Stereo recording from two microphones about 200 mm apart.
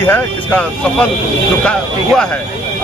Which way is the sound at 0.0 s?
10° left (ahead or behind).